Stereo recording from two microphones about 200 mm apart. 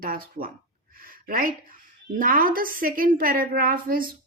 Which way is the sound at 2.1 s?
45° right (ahead or behind).